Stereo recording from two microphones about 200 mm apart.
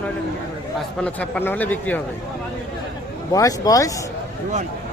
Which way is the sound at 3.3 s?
15° left (ahead or behind).